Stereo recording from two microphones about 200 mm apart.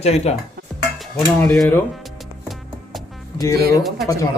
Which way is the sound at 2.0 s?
Centre (ahead or behind).